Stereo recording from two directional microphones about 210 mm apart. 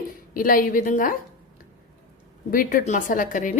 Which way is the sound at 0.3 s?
40° left (ahead or behind).